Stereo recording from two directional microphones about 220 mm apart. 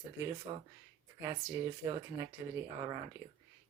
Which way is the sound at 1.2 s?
15° right (ahead or behind).